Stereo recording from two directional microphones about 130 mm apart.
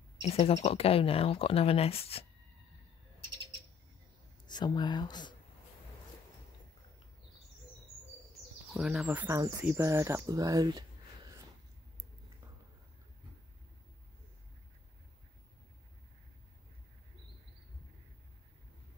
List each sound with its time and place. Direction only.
0.2 s speech: 50° left (ahead or behind)
4.5 s speech: 35° left (ahead or behind)
8.7 s speech: 5° right (ahead or behind)
9.8 s speech: 20° right (ahead or behind)